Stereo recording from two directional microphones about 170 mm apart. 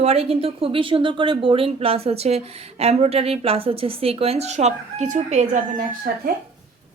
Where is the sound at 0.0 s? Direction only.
35° right (ahead or behind).